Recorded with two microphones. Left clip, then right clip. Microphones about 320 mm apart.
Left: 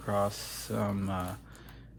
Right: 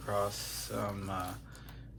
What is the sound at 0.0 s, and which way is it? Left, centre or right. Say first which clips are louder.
Speech: left 3 dB; left.